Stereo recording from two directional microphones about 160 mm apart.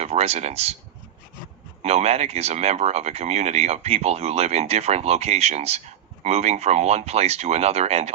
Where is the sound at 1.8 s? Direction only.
45° right (ahead or behind).